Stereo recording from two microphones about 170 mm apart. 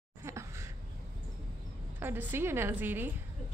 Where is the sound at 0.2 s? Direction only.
15° right (ahead or behind).